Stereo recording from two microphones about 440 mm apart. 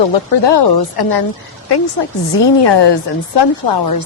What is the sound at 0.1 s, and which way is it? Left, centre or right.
A woman's voice, left.